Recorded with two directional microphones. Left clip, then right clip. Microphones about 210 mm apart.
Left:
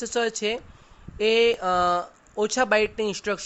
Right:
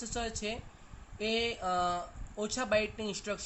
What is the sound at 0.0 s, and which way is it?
Speech, 50° left (ahead or behind).